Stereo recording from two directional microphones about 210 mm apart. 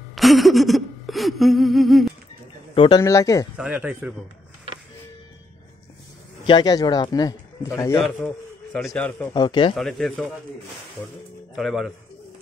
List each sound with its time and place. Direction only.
0.1 s a sound: centre (ahead or behind)
2.7 s speech: 20° left (ahead or behind)
3.5 s speech: 10° right (ahead or behind)
6.4 s a man's voice: 20° left (ahead or behind)
9.3 s speech: 20° left (ahead or behind)
9.8 s a man's voice: centre (ahead or behind)
11.5 s a man's voice: centre (ahead or behind)